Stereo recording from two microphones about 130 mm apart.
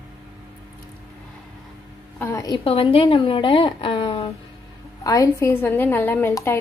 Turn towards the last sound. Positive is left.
turn(degrees=20)  # may be behind; listen again after turning